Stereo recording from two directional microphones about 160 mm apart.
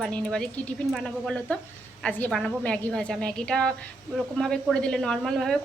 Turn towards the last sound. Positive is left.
turn(degrees=0)  # may be behind; listen again after turning